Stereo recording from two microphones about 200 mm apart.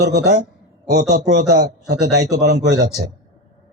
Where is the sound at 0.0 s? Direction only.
55° right (ahead or behind).